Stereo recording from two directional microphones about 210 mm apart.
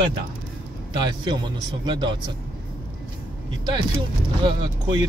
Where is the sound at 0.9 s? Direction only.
20° right (ahead or behind).